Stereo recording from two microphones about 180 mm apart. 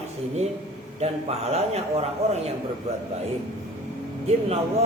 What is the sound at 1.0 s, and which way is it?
A man's voice, 35° right (ahead or behind).